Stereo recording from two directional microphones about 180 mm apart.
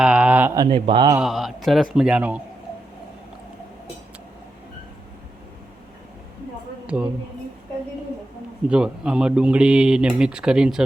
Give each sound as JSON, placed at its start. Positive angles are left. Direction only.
{"t": 0.0, "sound": "a sound", "side_deg": -5}
{"t": 0.5, "sound": "speech", "side_deg": -25}
{"t": 1.2, "sound": "speech", "side_deg": 0}
{"t": 6.8, "sound": "a woman's voice", "side_deg": -5}
{"t": 8.7, "sound": "speech", "side_deg": -5}